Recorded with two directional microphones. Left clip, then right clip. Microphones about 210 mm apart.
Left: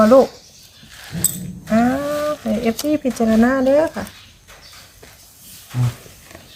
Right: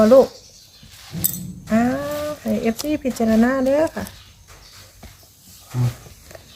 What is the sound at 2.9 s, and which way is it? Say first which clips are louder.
Speech: left 3 dB; 10° right (ahead or behind).